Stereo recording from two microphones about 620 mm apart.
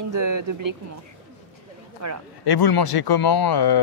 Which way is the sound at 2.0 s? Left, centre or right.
Right.